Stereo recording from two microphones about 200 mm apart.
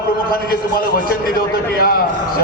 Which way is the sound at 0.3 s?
50° left (ahead or behind).